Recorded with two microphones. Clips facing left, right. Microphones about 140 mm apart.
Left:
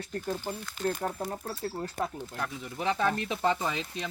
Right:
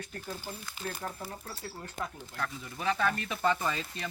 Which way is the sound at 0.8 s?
50° left (ahead or behind).